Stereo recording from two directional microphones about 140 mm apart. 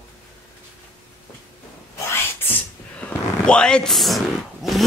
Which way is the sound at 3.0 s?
10° left (ahead or behind).